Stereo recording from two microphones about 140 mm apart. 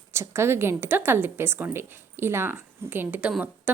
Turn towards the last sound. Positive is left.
turn(degrees=-10)  # may be behind; listen again after turning